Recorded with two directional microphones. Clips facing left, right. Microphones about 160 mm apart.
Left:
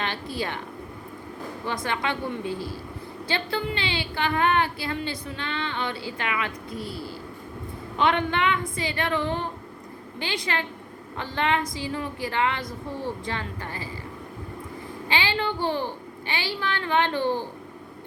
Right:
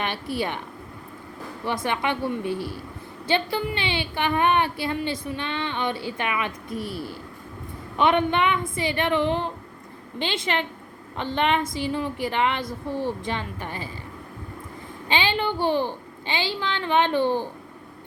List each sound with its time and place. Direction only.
0.0 s speech: 15° right (ahead or behind)
1.6 s a woman's voice: 20° right (ahead or behind)
15.1 s a woman's voice: 20° right (ahead or behind)